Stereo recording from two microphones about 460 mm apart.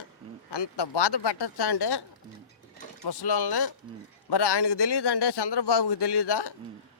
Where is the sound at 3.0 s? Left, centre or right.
Left.